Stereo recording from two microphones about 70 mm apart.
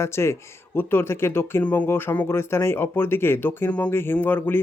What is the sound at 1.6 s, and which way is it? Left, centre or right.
Speech, left.